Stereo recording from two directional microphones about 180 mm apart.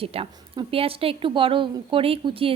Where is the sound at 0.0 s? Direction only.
30° right (ahead or behind).